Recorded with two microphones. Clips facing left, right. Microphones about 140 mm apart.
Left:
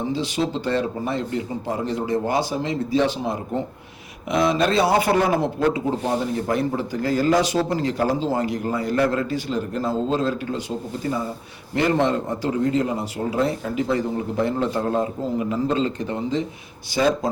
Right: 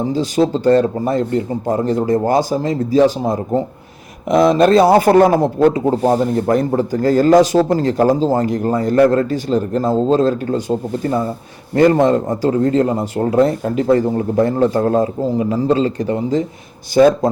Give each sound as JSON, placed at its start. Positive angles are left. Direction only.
{"t": 0.1, "sound": "a man's voice", "side_deg": -40}
{"t": 16.9, "sound": "a man's voice", "side_deg": -50}